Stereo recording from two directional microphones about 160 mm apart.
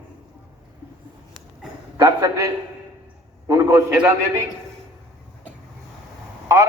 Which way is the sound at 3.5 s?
20° right (ahead or behind).